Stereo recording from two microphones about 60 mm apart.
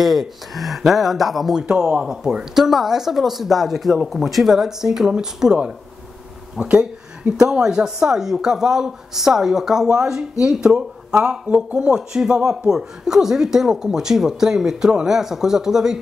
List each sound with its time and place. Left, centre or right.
0.0 s speech: centre
6.7 s a sound: centre
7.5 s speech: centre